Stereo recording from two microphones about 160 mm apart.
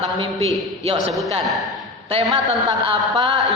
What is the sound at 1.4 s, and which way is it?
Speech, centre (ahead or behind).